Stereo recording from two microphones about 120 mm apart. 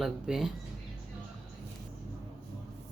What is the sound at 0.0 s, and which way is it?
Speech, centre (ahead or behind).